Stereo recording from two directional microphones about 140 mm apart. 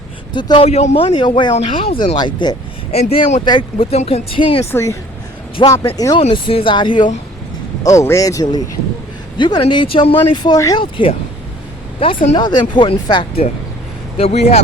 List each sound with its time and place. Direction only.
0.3 s speech: 35° left (ahead or behind)
0.7 s speech: 50° left (ahead or behind); by 2.6 s 30° left (ahead or behind)
2.9 s speech: 45° left (ahead or behind)
3.4 s speech: 30° left (ahead or behind)
3.9 s speech: 45° left (ahead or behind)
4.7 s speech: 20° left (ahead or behind)
5.6 s speech: 35° left (ahead or behind)
7.9 s speech: 20° left (ahead or behind); by 12.4 s 45° left (ahead or behind)
12.4 s speech: 30° left (ahead or behind); by 14.6 s 45° left (ahead or behind)